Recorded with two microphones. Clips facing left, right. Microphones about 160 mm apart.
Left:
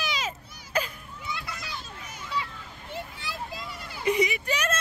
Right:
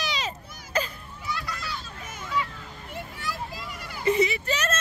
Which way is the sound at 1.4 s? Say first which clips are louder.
Right 4 dB; 20° left (ahead or behind).